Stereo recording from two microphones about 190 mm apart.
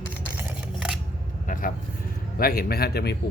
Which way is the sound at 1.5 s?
45° left (ahead or behind).